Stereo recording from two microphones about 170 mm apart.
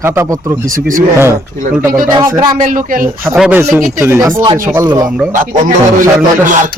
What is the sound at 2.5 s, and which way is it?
Speech, 50° right (ahead or behind).